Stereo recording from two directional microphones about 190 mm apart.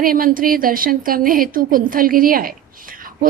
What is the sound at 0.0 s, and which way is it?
A woman's voice, 50° right (ahead or behind).